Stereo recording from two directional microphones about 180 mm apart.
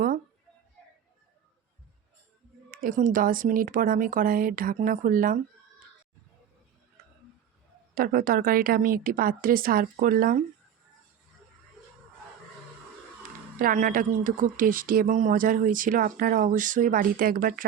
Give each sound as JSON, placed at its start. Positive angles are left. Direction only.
{"t": 2.6, "sound": "speech", "side_deg": -50}
{"t": 7.9, "sound": "speech", "side_deg": -55}
{"t": 13.6, "sound": "speech", "side_deg": -50}